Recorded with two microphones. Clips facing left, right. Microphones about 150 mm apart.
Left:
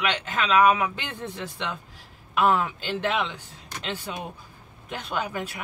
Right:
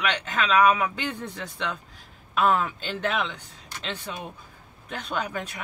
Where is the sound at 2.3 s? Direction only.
Centre (ahead or behind).